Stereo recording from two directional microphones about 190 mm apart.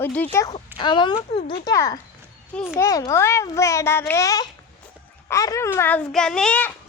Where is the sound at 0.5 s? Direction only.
25° left (ahead or behind).